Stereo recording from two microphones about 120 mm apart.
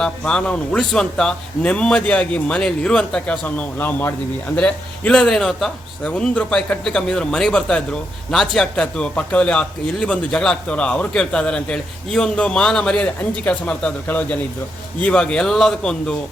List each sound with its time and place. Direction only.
0.0 s a man's voice: 5° left (ahead or behind)